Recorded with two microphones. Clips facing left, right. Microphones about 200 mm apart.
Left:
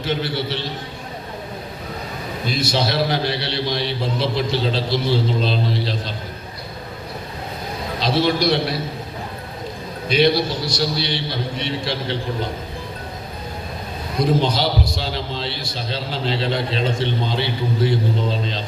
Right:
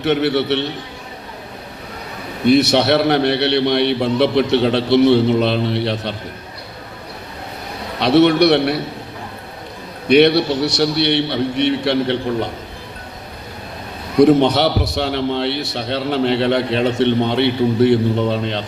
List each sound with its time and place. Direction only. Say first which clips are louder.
0.0 s a man's voice: right 7 dB; 70° right (ahead or behind)
2.4 s a man's voice: right 10 dB; 70° right (ahead or behind)
7.9 s a man's voice: right 8 dB; 65° right (ahead or behind)
10.1 s a man's voice: right 6 dB; 65° right (ahead or behind)
14.2 s a man's voice: right 8 dB; 70° right (ahead or behind)